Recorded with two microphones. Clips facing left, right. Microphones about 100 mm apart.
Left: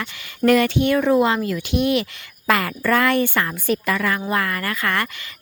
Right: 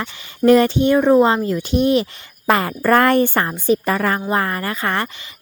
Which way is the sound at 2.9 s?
40° right (ahead or behind).